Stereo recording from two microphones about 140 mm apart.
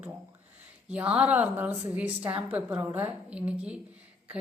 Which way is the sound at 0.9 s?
10° right (ahead or behind).